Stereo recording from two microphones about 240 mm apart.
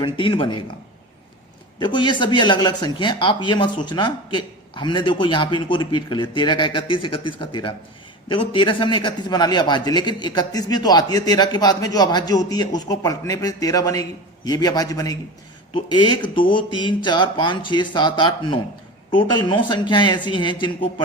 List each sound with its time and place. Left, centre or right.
0.0 s speech: left
1.8 s a man's voice: centre